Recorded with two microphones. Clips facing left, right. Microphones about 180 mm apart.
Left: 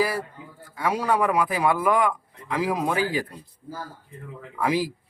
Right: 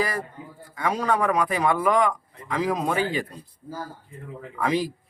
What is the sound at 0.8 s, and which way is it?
A man's voice, 10° left (ahead or behind).